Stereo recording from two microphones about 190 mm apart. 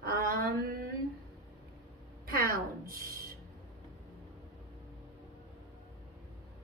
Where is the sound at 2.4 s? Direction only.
50° right (ahead or behind).